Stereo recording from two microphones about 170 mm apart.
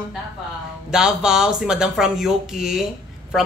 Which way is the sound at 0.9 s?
5° right (ahead or behind).